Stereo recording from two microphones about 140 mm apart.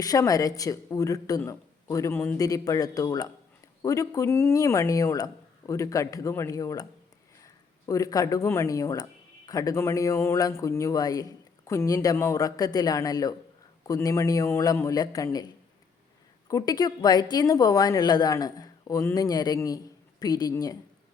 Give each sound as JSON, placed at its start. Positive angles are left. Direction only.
{"t": 0.0, "sound": "a woman's voice", "side_deg": 25}
{"t": 16.5, "sound": "a woman's voice", "side_deg": 25}